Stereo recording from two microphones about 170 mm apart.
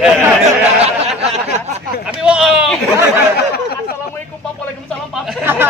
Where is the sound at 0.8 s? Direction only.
35° right (ahead or behind).